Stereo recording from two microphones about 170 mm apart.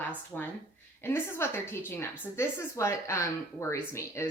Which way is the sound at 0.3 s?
10° left (ahead or behind).